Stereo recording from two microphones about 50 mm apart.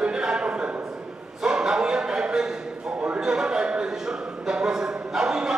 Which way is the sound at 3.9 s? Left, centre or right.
Centre.